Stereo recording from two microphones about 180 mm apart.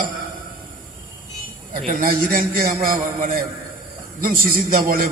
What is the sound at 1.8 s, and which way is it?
A man's voice, 50° right (ahead or behind).